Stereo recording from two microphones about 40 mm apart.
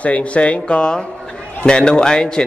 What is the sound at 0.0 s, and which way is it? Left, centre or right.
A man's voice, left.